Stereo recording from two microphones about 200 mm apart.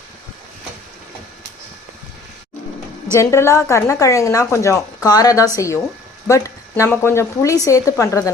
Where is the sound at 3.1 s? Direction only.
15° left (ahead or behind).